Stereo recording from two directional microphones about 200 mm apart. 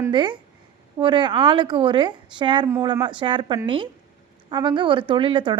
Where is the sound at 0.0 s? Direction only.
25° right (ahead or behind).